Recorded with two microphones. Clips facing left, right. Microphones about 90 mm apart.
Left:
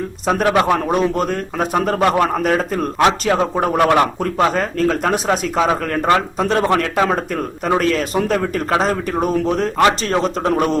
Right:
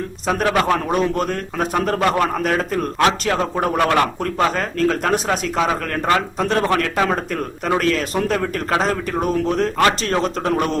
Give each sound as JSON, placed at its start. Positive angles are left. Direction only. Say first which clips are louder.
{"t": 0.4, "sound": "a man's voice", "louder": "left 2 dB", "side_deg": 10}
{"t": 4.5, "sound": "a man's voice", "louder": "left 2 dB", "side_deg": 5}